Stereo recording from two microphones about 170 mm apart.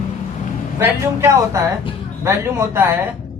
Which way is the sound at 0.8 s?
15° right (ahead or behind).